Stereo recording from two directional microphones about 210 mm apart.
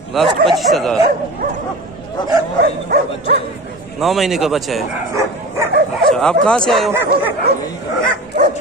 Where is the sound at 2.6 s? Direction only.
50° right (ahead or behind).